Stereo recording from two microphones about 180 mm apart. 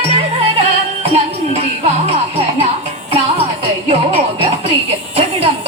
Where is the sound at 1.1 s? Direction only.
35° right (ahead or behind).